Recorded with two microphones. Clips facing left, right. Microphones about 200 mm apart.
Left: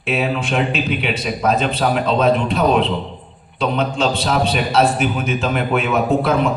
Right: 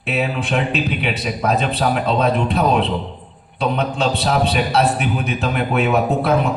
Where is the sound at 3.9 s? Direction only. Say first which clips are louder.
Even; 65° right (ahead or behind).